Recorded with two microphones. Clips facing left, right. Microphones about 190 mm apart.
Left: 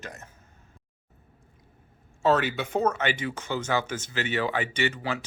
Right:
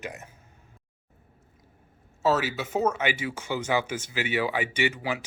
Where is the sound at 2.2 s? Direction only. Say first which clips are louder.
Left 1 dB; 5° right (ahead or behind).